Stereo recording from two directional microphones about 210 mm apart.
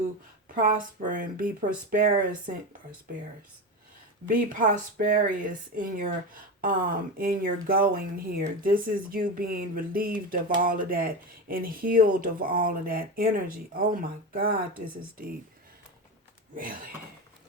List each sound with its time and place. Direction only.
0.5 s speech: 40° right (ahead or behind)
4.3 s speech: 40° right (ahead or behind)
16.6 s speech: 40° right (ahead or behind)